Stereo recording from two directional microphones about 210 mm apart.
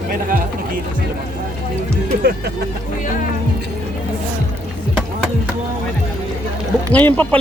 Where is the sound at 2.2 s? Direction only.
50° right (ahead or behind).